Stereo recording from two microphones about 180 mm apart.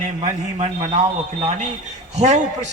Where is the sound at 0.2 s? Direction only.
35° right (ahead or behind).